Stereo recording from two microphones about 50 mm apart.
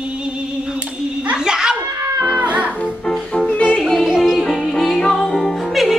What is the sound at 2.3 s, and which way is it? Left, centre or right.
Music, right.